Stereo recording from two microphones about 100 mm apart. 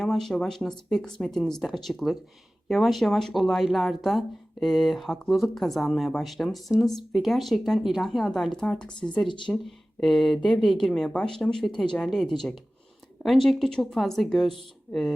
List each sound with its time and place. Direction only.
0.0 s speech: 5° left (ahead or behind)
8.9 s speech: 50° left (ahead or behind)
9.5 s speech: centre (ahead or behind)